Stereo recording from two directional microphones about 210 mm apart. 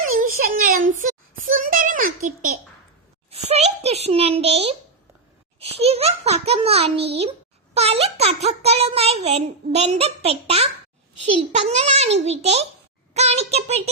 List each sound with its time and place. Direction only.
0.1 s child singing: 40° right (ahead or behind)
3.2 s a sound: 30° right (ahead or behind)
5.7 s a child's voice: 30° right (ahead or behind)
13.1 s child singing: 30° right (ahead or behind)